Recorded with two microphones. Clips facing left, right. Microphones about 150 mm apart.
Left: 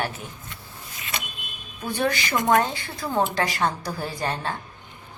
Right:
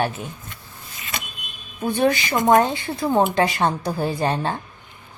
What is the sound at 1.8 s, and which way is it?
A woman's voice, 20° right (ahead or behind).